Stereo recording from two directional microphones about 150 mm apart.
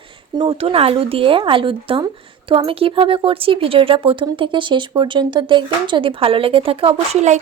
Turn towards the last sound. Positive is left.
turn(degrees=-45)  # may be behind; listen again after turning